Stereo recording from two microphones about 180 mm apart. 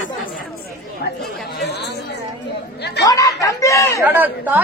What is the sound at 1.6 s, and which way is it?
Chatter, 70° left (ahead or behind).